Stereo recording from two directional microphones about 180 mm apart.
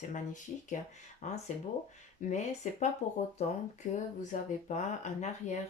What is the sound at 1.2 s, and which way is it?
Speech, 40° left (ahead or behind).